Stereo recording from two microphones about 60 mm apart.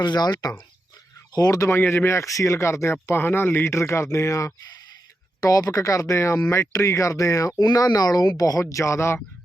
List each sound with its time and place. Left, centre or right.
0.4 s speech: left
1.4 s speech: left
1.7 s speech: left
2.0 s speech: left
5.4 s speech: left
8.7 s speech: left